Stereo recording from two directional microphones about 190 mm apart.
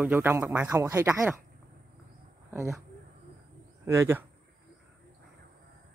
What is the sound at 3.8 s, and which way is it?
Speech, 10° right (ahead or behind).